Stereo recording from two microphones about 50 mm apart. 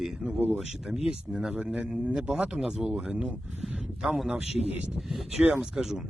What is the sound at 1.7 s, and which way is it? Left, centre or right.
Speech, right.